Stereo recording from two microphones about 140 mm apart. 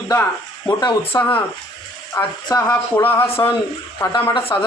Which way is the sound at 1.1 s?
10° left (ahead or behind).